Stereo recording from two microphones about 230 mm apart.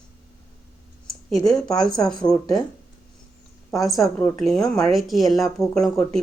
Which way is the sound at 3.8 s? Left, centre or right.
Centre.